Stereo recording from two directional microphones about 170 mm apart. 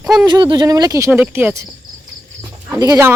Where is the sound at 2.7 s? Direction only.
20° right (ahead or behind).